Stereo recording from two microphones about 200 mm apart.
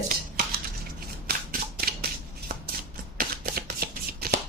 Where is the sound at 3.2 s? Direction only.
45° right (ahead or behind).